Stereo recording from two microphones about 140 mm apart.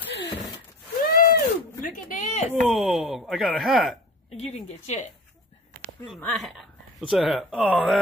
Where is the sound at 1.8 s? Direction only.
65° left (ahead or behind).